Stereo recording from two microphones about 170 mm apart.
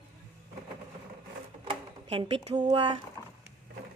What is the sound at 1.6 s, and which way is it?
Speech, 30° right (ahead or behind).